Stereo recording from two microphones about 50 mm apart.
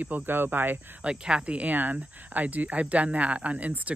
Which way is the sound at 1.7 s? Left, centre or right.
Right.